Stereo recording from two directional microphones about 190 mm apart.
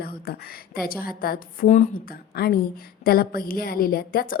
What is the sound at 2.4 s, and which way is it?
Speech, 55° left (ahead or behind).